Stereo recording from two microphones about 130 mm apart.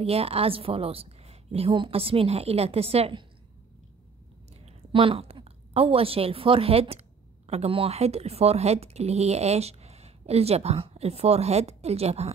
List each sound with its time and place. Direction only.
0.0 s speech: 50° right (ahead or behind)
4.6 s a woman's voice: 50° right (ahead or behind)